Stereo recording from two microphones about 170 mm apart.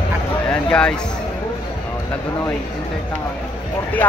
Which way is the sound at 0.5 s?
5° left (ahead or behind).